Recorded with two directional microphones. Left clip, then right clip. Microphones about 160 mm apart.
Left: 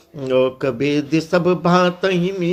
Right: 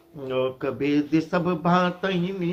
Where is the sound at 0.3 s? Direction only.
40° left (ahead or behind).